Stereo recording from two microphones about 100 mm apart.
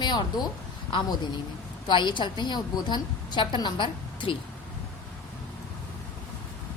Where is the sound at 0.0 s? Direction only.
45° left (ahead or behind).